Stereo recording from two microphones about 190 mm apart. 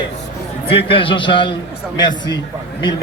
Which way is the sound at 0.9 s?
25° left (ahead or behind).